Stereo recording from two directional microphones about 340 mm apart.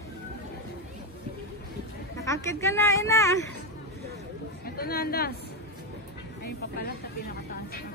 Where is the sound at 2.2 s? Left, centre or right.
Centre.